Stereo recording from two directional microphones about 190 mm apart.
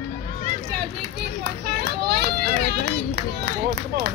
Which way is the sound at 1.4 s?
60° right (ahead or behind).